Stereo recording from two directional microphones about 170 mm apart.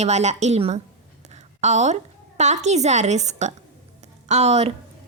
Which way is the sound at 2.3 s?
40° right (ahead or behind).